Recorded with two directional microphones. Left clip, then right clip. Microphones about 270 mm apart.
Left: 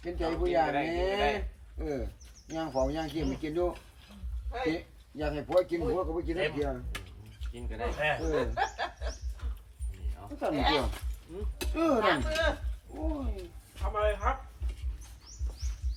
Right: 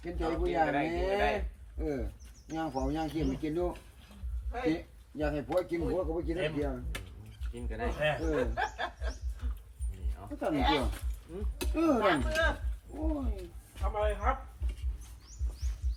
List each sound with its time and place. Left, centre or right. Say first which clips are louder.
0.0 s speech: left 2 dB; centre
8.5 s chuckle: left 2 dB; left
10.2 s speech: left 1 dB; centre